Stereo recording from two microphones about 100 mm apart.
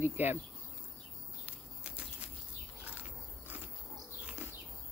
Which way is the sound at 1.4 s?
10° right (ahead or behind).